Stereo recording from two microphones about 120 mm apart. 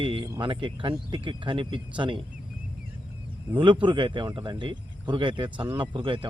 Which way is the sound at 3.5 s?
40° right (ahead or behind).